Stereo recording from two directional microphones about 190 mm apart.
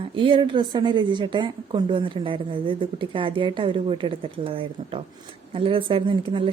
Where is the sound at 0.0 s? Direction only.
25° right (ahead or behind).